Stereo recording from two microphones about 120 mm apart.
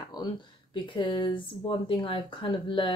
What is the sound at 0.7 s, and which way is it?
A woman's voice, 45° left (ahead or behind).